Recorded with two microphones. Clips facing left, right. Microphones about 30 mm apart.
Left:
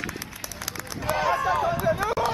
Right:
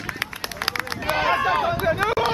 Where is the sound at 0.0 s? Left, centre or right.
Right.